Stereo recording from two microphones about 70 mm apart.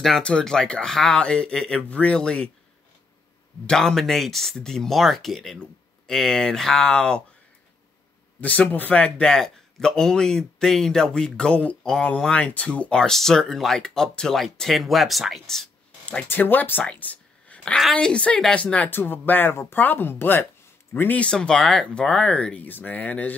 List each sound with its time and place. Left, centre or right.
0.0 s a man's voice: centre
3.6 s speech: centre
8.4 s a man's voice: left; by 15.7 s centre
16.3 s a man's voice: left
18.9 s speech: left
21.2 s speech: centre